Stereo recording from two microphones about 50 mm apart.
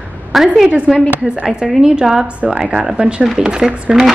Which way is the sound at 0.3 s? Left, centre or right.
Centre.